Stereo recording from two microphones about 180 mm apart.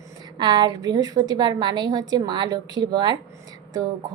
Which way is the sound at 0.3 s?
25° right (ahead or behind).